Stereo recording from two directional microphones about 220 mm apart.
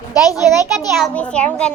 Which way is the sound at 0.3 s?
15° left (ahead or behind).